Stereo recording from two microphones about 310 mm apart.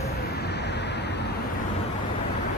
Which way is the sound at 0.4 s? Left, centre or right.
Left.